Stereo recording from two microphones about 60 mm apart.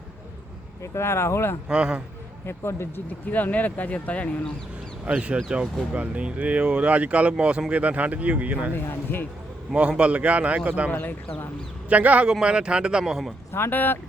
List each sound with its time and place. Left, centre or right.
0.8 s speech: left
1.6 s speech: centre
2.5 s speech: left
3.3 s speech: left
5.0 s speech: centre
8.7 s speech: left
10.0 s speech: right
10.9 s speech: left
11.9 s speech: right; by 13.3 s centre
13.5 s speech: left